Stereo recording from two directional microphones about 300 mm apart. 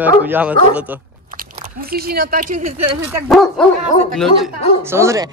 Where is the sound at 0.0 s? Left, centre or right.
Centre.